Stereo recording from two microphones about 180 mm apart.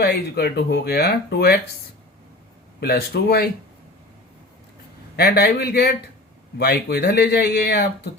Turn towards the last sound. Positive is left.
turn(degrees=60)  # may be behind; listen again after turning